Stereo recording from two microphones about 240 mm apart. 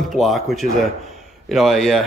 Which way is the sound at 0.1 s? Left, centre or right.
Centre.